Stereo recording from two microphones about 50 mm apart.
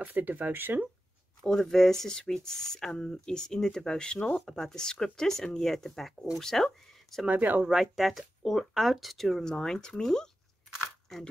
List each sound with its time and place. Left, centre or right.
0.0 s speech: right
1.4 s speech: centre
7.2 s speech: right
7.6 s speech: centre
9.4 s speech: centre